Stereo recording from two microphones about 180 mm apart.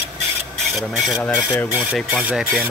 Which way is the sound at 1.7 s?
5° right (ahead or behind).